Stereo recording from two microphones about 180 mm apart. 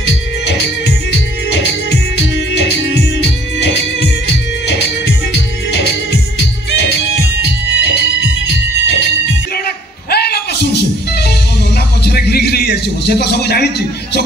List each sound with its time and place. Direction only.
0.5 s music: 70° left (ahead or behind)
7.7 s music: 80° left
10.1 s music: 65° left (ahead or behind)
12.0 s a sound: 65° left (ahead or behind)